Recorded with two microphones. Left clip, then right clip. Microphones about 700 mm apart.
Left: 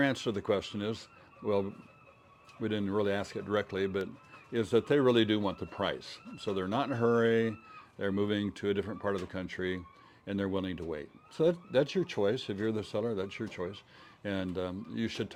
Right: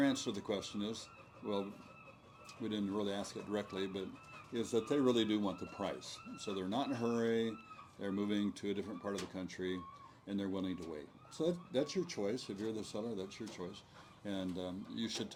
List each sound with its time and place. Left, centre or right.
0.0 s speech: left
2.6 s speech: left